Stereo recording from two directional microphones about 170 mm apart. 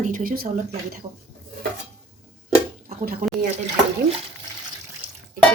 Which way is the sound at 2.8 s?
60° right (ahead or behind).